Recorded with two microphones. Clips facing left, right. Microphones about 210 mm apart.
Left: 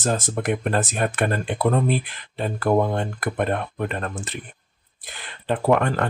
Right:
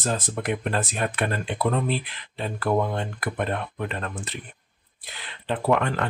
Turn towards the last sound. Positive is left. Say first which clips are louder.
# left 3 dB
turn(degrees=45)  # may be behind; listen again after turning